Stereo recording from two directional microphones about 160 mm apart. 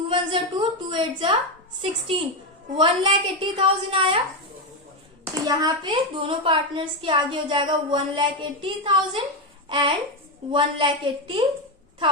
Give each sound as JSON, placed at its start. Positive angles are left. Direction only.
{"t": 0.1, "sound": "a woman's voice", "side_deg": -30}
{"t": 5.5, "sound": "a woman's voice", "side_deg": -25}